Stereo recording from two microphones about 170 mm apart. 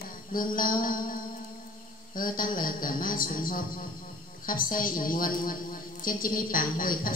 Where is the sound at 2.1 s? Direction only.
55° left (ahead or behind).